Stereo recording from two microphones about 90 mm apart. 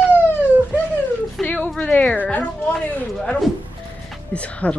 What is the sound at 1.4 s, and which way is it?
Speech, centre (ahead or behind).